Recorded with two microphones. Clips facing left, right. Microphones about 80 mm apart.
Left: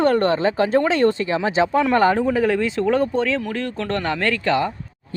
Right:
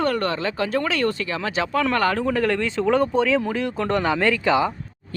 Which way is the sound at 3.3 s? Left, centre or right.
Centre.